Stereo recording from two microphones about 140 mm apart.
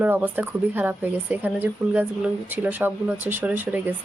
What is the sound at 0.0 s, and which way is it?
Speech, 15° right (ahead or behind).